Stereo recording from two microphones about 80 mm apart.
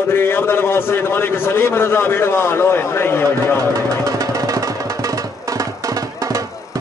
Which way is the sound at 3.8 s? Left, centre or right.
Right.